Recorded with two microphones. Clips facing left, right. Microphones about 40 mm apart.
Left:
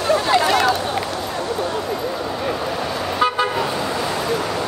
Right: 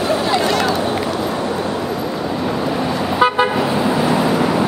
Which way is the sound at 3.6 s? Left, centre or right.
Centre.